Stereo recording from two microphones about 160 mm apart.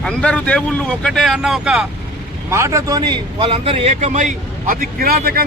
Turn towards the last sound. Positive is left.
turn(degrees=-70)  # may be behind; listen again after turning